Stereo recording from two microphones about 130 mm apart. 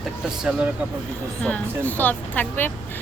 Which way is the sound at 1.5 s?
10° left (ahead or behind).